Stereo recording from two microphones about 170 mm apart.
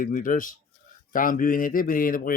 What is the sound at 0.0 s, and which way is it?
Speech, 50° left (ahead or behind).